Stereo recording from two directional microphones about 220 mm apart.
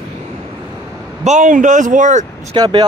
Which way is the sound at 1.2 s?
35° right (ahead or behind).